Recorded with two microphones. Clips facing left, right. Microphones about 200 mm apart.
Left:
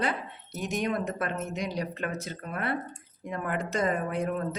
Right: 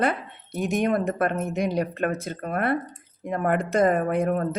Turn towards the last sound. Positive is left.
turn(degrees=-55)  # may be behind; listen again after turning